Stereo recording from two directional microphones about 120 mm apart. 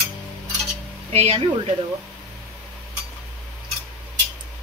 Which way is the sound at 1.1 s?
60° right (ahead or behind).